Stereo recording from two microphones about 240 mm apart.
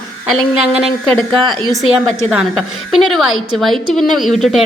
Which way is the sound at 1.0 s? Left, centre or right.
Centre.